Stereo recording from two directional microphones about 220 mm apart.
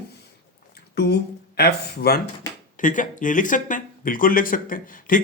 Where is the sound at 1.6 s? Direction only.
45° left (ahead or behind).